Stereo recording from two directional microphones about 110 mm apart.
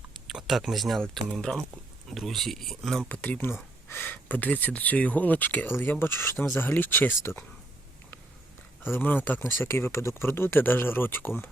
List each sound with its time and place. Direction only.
0.3 s speech: centre (ahead or behind)
3.1 s speech: 15° left (ahead or behind)
8.8 s speech: 15° left (ahead or behind)